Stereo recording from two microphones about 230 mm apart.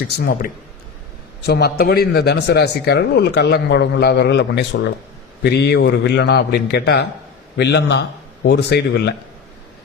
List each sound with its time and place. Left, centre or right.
0.2 s speech: left